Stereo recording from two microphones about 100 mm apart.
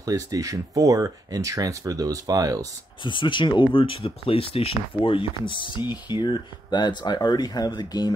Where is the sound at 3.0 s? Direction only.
55° left (ahead or behind).